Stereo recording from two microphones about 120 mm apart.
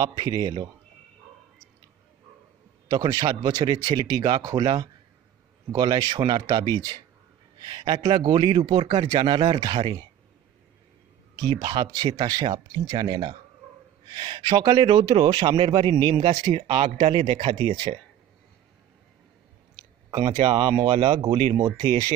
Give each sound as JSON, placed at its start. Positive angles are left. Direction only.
{"t": 0.0, "sound": "a man's voice", "side_deg": -30}
{"t": 2.9, "sound": "a man's voice", "side_deg": -35}
{"t": 11.3, "sound": "a man's voice", "side_deg": -35}
{"t": 16.3, "sound": "speech", "side_deg": -60}
{"t": 20.1, "sound": "speech", "side_deg": -40}